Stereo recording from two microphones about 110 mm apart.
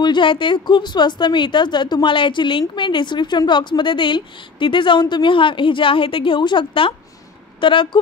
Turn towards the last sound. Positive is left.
turn(degrees=50)  # may be behind; listen again after turning